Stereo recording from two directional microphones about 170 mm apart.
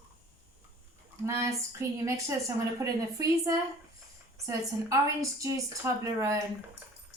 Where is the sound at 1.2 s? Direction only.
15° right (ahead or behind).